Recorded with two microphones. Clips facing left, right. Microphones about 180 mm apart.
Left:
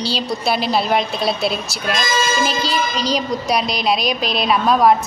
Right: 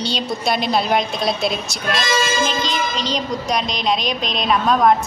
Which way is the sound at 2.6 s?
35° left (ahead or behind).